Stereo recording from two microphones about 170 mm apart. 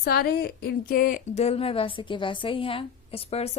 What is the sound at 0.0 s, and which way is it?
A woman's voice, 65° left (ahead or behind).